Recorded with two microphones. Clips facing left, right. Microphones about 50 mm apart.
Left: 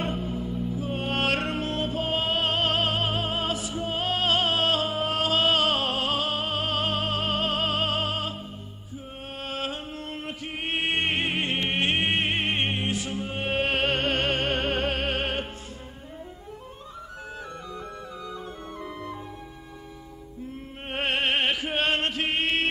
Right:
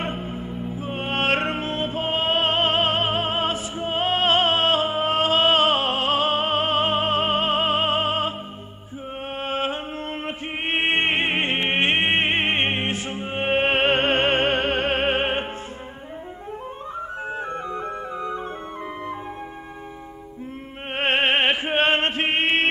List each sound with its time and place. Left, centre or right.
0.0 s music: right
9.4 s music: right
17.3 s music: right
20.9 s music: right